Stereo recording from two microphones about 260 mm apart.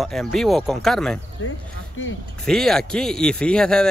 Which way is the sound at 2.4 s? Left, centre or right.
Centre.